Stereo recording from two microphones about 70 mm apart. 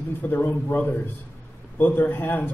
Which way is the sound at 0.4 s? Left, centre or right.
Left.